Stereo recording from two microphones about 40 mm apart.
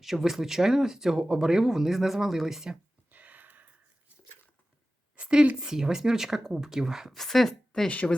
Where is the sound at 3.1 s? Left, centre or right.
Right.